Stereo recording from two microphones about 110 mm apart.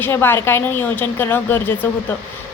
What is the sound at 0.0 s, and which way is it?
A woman's voice, 20° left (ahead or behind).